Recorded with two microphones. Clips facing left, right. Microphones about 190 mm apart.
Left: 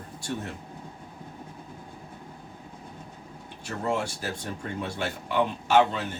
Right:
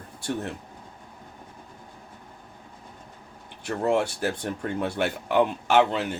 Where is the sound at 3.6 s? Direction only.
65° right (ahead or behind).